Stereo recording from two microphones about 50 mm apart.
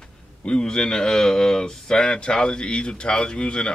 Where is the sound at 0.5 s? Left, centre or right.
Centre.